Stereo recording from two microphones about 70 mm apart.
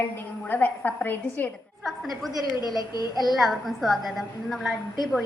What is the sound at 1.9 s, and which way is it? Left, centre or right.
Speech, centre.